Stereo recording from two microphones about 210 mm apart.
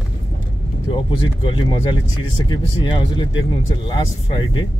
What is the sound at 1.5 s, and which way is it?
Speech, 20° left (ahead or behind).